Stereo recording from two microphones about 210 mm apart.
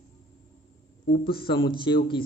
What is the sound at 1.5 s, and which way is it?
Speech, 25° left (ahead or behind).